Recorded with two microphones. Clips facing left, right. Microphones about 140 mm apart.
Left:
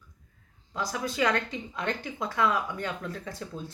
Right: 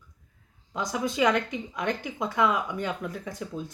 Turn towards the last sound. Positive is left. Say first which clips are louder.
# right 3 dB
turn(degrees=-15)  # may be behind; listen again after turning